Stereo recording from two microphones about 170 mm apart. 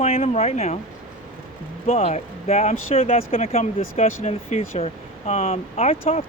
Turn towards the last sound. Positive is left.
turn(degrees=35)  # may be behind; listen again after turning